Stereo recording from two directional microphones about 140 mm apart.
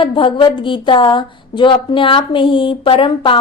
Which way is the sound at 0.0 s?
40° left (ahead or behind).